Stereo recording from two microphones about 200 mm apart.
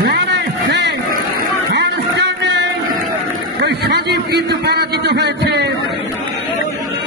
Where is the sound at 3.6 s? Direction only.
55° right (ahead or behind).